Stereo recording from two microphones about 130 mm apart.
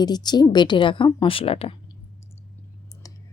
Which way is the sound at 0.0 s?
35° left (ahead or behind).